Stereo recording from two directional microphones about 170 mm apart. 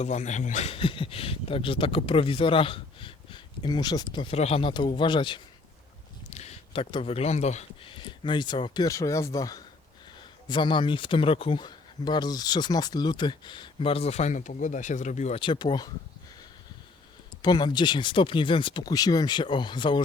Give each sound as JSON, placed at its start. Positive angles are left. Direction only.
{"t": 0.0, "sound": "speech", "side_deg": 45}
{"t": 6.3, "sound": "speech", "side_deg": 40}
{"t": 15.4, "sound": "speech", "side_deg": 30}
{"t": 17.4, "sound": "speech", "side_deg": 25}